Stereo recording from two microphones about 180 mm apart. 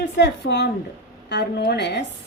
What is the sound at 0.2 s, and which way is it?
A woman's voice, 70° left (ahead or behind).